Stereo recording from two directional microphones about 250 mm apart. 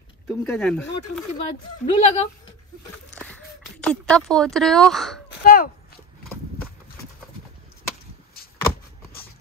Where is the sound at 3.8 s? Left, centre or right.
Centre.